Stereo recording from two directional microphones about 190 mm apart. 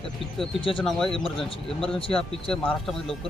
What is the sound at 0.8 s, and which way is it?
Speech, centre (ahead or behind).